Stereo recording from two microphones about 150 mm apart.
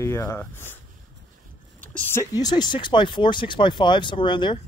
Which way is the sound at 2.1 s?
25° left (ahead or behind).